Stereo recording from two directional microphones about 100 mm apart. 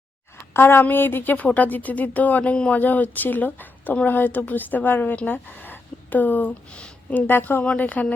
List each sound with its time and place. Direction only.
0.5 s speech: 25° left (ahead or behind)